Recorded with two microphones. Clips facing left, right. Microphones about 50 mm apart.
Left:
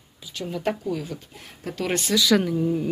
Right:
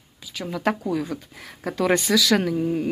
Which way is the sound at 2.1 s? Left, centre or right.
Right.